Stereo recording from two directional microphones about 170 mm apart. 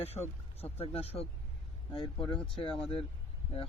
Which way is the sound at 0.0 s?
35° left (ahead or behind).